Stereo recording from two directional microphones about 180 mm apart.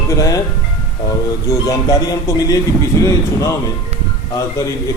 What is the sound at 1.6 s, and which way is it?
A man's voice, 20° left (ahead or behind).